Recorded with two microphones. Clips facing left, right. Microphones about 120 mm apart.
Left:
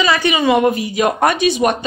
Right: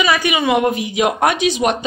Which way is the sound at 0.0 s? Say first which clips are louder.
Left 1 dB; 10° right (ahead or behind).